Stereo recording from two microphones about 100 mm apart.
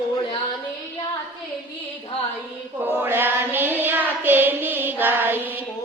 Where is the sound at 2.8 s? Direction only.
20° right (ahead or behind).